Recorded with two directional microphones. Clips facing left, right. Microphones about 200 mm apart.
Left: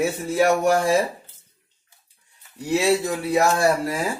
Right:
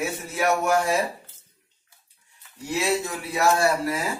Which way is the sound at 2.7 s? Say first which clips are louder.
Left 5 dB; 35° left (ahead or behind).